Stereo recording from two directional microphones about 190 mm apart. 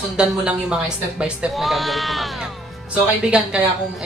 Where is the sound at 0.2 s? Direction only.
5° right (ahead or behind).